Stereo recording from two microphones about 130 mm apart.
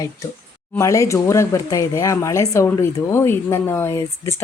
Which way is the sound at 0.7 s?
25° left (ahead or behind).